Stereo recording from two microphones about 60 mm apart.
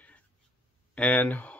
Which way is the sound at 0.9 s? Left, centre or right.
Left.